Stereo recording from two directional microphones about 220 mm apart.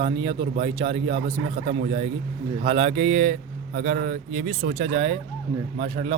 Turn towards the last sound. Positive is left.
turn(degrees=-25)  # may be behind; listen again after turning